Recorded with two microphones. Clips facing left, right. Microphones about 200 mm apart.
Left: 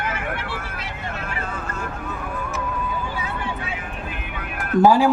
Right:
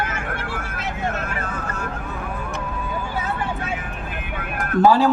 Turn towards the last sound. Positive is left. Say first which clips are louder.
# even
turn(degrees=10)  # may be behind; listen again after turning